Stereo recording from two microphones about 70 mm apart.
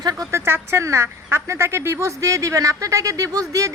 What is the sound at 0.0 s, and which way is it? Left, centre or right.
Speech, right.